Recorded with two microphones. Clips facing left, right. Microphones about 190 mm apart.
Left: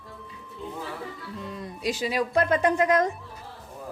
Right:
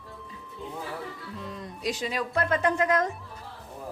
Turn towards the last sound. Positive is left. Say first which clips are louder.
# left 3 dB
turn(degrees=15)  # may be behind; listen again after turning